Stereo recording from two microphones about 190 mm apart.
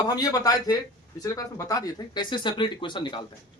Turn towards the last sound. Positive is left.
turn(degrees=25)  # may be behind; listen again after turning